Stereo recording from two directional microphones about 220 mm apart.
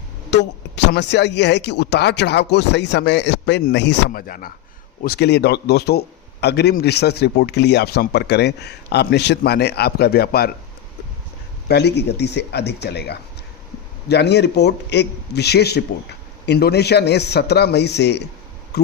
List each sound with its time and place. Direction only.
0.3 s a man's voice: 50° left (ahead or behind)
11.7 s a man's voice: 50° left (ahead or behind)
18.7 s a sound: 50° left (ahead or behind)